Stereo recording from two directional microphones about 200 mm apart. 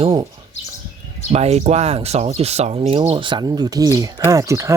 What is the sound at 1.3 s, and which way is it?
Speech, 30° right (ahead or behind).